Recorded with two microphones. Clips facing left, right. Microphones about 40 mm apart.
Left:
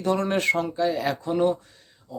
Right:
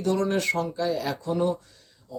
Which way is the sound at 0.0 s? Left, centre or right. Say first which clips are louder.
Left 1 dB; left.